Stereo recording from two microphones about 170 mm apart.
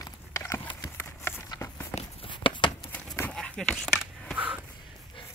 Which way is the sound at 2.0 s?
30° left (ahead or behind).